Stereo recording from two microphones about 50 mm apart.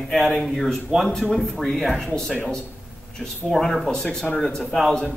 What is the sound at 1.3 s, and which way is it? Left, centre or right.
Speech, centre.